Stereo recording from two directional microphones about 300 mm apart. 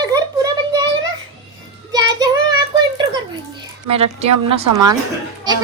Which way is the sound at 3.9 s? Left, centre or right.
Centre.